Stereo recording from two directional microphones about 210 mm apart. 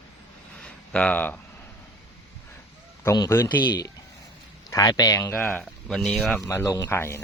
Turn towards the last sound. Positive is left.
turn(degrees=10)  # may be behind; listen again after turning